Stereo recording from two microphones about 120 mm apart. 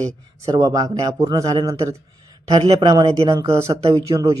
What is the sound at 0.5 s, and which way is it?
A man's voice, 35° right (ahead or behind).